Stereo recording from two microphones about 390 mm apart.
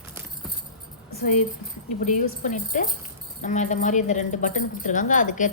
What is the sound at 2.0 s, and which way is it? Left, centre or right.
A woman's voice, centre.